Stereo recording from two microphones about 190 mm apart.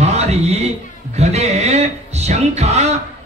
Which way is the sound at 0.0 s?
35° right (ahead or behind).